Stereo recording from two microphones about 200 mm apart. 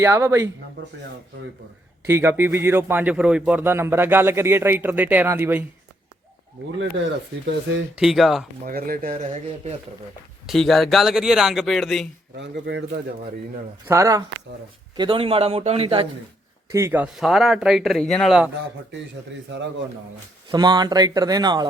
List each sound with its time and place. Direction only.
0.0 s a man's voice: 15° right (ahead or behind)
2.0 s a man's voice: 10° right (ahead or behind)
6.7 s speech: 70° right (ahead or behind)
7.9 s speech: centre (ahead or behind)
8.6 s speech: 45° right (ahead or behind)
10.4 s speech: centre (ahead or behind)
12.4 s speech: 60° right (ahead or behind)
13.8 s a man's voice: 15° right (ahead or behind)
16.7 s speech: 10° right (ahead or behind)
19.5 s speech: 65° right (ahead or behind)
20.5 s speech: 20° right (ahead or behind)